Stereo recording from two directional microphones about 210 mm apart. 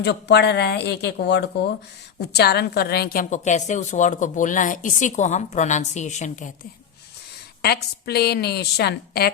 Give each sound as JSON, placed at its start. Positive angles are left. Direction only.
{"t": 0.0, "sound": "a woman's voice", "side_deg": 50}
{"t": 7.6, "sound": "a woman's voice", "side_deg": 50}